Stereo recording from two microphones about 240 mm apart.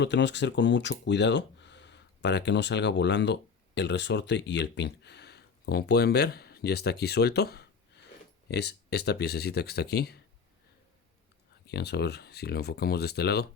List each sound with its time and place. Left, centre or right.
0.0 s speech: left
11.7 s speech: left